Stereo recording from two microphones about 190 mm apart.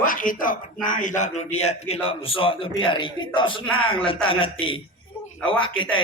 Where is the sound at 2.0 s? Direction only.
30° left (ahead or behind).